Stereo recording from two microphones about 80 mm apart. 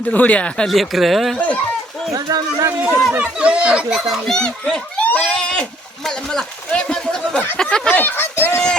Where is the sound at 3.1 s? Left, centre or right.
Centre.